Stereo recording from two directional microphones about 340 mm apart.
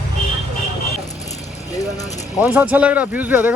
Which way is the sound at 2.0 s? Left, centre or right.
Centre.